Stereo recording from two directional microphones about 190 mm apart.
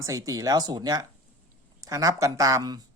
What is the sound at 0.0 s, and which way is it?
Speech, 15° right (ahead or behind).